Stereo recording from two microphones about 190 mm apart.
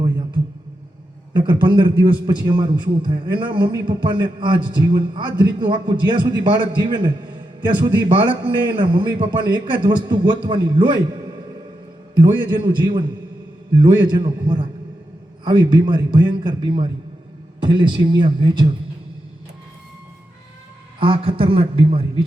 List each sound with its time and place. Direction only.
1.3 s a man's voice: 25° right (ahead or behind)
12.1 s a man's voice: 25° right (ahead or behind)
21.0 s a man's voice: 30° right (ahead or behind)